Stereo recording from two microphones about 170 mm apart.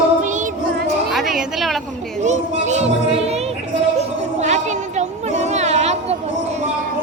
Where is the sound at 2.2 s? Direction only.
45° right (ahead or behind).